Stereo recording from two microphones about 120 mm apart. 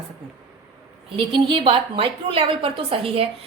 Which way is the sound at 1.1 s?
50° right (ahead or behind).